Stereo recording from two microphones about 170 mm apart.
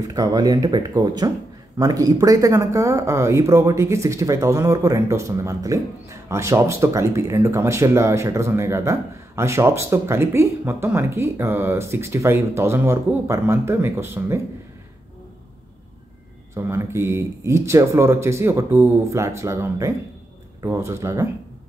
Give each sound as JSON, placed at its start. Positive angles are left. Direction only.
{"t": 0.1, "sound": "speech", "side_deg": -20}
{"t": 16.5, "sound": "speech", "side_deg": -15}